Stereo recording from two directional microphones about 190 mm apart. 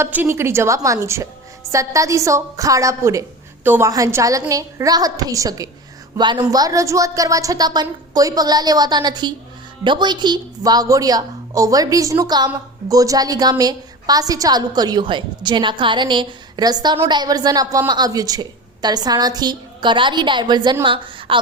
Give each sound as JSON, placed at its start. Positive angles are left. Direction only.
{"t": 0.0, "sound": "a woman's voice", "side_deg": -10}